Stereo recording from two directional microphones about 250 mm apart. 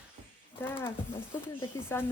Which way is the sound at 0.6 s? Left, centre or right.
Centre.